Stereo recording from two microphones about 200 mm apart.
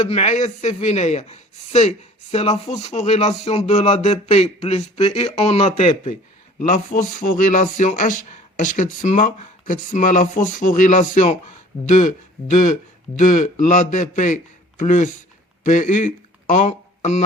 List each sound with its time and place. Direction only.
0.0 s speech: 35° left (ahead or behind)
6.6 s speech: 40° left (ahead or behind)